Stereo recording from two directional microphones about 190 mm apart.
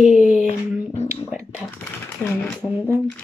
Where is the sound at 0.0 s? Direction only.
5° right (ahead or behind).